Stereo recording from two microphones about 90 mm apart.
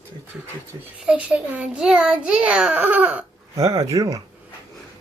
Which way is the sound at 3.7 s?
35° right (ahead or behind).